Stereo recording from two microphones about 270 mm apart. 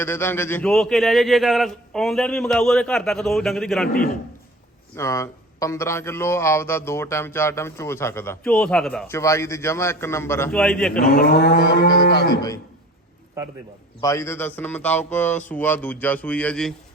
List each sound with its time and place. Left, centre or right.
0.0 s a man's voice: centre
3.8 s livestock: left
4.9 s a man's voice: centre
10.9 s livestock: left
12.1 s a man's voice: centre
14.0 s a man's voice: centre